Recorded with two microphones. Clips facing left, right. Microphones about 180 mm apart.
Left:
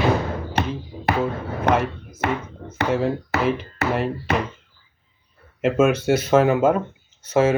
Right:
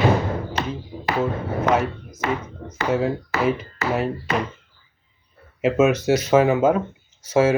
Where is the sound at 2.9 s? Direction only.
5° right (ahead or behind).